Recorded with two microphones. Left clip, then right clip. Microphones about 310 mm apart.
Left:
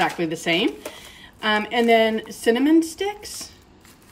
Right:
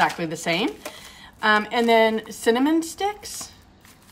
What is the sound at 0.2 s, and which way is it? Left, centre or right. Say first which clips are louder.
Speech: left 3 dB; right.